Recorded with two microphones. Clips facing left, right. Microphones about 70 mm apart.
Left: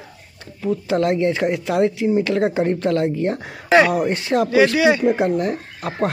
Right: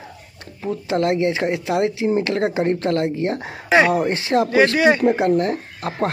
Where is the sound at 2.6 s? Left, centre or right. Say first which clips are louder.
Left 1 dB; right.